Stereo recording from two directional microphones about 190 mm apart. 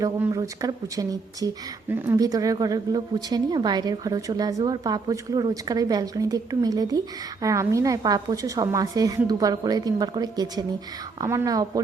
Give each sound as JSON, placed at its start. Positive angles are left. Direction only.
{"t": 0.0, "sound": "a woman's voice", "side_deg": -20}